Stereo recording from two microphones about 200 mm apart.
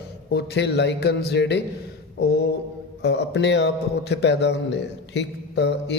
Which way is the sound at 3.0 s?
55° left (ahead or behind).